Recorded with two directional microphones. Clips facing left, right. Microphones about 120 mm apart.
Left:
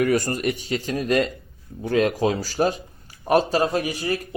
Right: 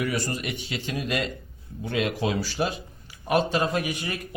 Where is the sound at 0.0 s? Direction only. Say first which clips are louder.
Left 7 dB; 50° left (ahead or behind).